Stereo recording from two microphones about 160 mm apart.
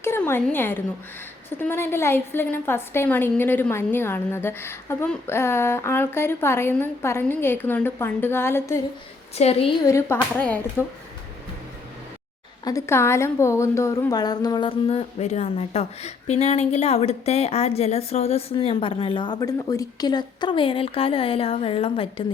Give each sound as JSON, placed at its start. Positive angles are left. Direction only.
{"t": 0.0, "sound": "a woman's voice", "side_deg": 15}
{"t": 9.4, "sound": "a woman's voice", "side_deg": 40}
{"t": 9.8, "sound": "a woman's voice", "side_deg": 20}
{"t": 12.6, "sound": "a woman's voice", "side_deg": 20}